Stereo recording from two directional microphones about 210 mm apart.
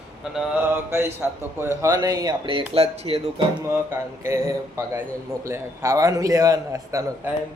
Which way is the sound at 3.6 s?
10° right (ahead or behind).